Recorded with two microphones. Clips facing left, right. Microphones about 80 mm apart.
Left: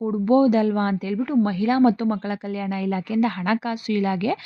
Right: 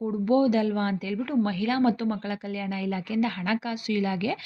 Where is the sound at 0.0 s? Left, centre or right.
Left.